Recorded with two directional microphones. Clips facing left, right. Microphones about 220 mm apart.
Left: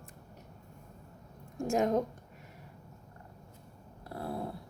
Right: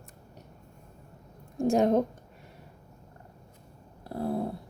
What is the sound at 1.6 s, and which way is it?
Speech, 35° right (ahead or behind).